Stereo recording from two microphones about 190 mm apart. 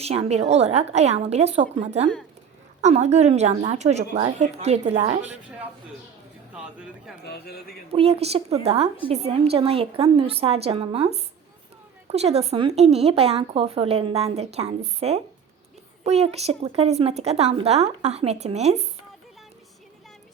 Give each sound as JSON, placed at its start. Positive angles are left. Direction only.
{"t": 0.0, "sound": "speech", "side_deg": -35}
{"t": 6.5, "sound": "speech", "side_deg": -5}
{"t": 7.3, "sound": "a man's voice", "side_deg": 60}
{"t": 7.9, "sound": "speech", "side_deg": -30}